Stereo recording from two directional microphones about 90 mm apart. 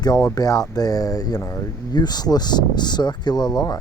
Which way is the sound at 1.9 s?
50° left (ahead or behind).